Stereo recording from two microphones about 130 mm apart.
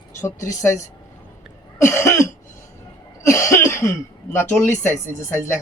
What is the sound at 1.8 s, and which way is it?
Speech, 20° left (ahead or behind).